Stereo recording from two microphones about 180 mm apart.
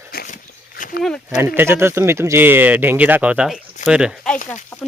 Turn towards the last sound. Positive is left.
turn(degrees=-5)  # may be behind; listen again after turning